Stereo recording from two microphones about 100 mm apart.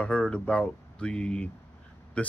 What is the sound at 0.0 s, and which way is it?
Speech, 10° left (ahead or behind).